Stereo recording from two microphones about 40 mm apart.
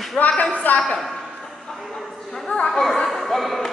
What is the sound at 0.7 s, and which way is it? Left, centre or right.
Speech, left.